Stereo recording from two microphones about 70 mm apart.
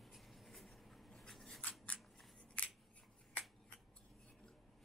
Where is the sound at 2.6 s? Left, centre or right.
Centre.